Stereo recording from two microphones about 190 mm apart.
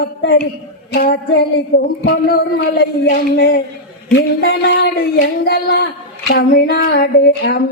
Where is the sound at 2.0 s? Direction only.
55° left (ahead or behind).